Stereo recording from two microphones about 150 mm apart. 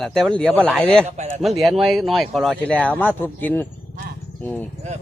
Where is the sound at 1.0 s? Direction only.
45° right (ahead or behind).